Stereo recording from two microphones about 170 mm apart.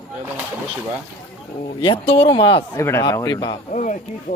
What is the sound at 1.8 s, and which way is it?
Speech, 30° left (ahead or behind).